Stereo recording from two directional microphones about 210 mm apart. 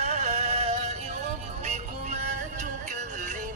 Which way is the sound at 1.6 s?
30° right (ahead or behind).